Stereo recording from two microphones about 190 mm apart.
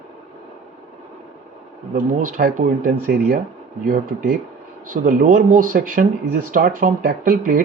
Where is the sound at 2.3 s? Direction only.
45° right (ahead or behind).